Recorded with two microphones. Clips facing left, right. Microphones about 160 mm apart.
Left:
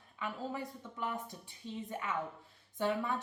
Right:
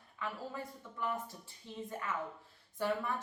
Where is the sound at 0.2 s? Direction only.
20° left (ahead or behind).